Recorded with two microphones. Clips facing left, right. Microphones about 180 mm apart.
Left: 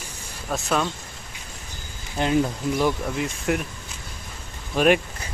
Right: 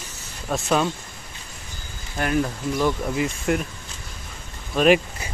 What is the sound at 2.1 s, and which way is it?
Speech, 20° left (ahead or behind).